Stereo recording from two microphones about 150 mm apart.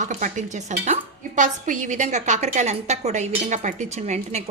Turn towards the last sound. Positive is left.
turn(degrees=-50)  # may be behind; listen again after turning